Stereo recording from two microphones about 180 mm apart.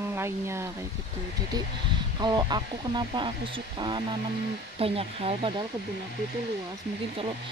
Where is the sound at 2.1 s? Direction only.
25° right (ahead or behind).